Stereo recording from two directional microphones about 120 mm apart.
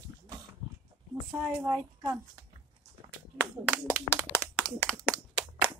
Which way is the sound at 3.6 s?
10° right (ahead or behind).